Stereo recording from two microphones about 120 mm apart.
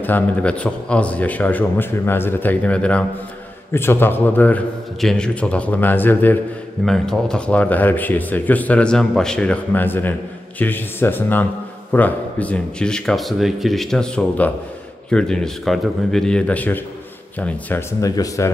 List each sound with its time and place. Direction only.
0.0 s speech: 15° left (ahead or behind)
6.8 s speech: 5° left (ahead or behind)
18.0 s speech: 30° left (ahead or behind)